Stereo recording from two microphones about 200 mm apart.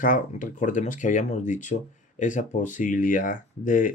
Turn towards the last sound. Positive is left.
turn(degrees=40)  # may be behind; listen again after turning